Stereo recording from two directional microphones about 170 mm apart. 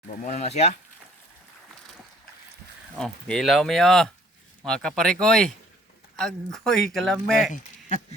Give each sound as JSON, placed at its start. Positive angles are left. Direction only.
{"t": 0.2, "sound": "speech", "side_deg": 40}
{"t": 3.0, "sound": "speech", "side_deg": 5}
{"t": 7.5, "sound": "speech", "side_deg": 45}